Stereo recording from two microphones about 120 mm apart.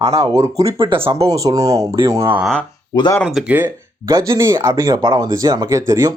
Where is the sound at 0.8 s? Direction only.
45° right (ahead or behind).